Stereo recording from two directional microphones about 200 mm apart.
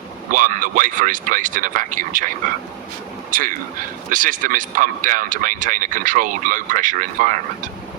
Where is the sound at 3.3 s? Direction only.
45° right (ahead or behind).